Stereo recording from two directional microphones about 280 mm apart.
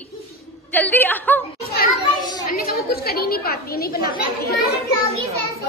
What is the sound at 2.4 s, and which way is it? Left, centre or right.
A woman's voice, left.